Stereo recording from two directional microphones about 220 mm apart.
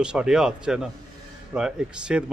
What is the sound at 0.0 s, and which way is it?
Speech, 5° right (ahead or behind).